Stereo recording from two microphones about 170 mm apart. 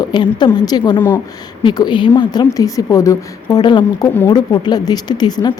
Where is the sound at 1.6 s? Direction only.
30° left (ahead or behind).